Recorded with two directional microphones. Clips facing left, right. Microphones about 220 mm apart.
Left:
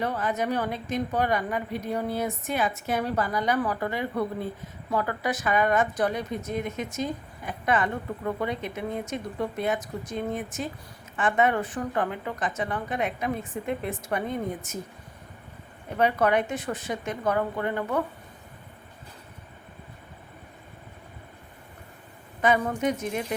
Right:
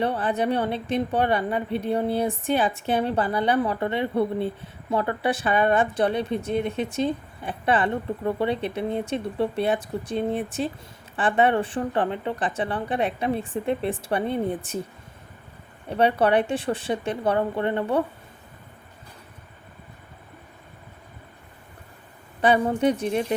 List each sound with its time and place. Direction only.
0.0 s speech: 30° right (ahead or behind)
16.0 s speech: 30° right (ahead or behind)
22.4 s speech: 30° right (ahead or behind)